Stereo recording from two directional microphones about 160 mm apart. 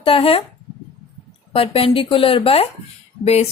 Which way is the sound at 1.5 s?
35° left (ahead or behind).